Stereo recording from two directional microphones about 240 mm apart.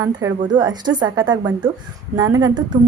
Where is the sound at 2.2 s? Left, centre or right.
Centre.